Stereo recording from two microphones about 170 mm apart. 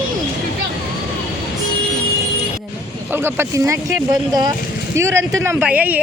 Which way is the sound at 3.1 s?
15° right (ahead or behind).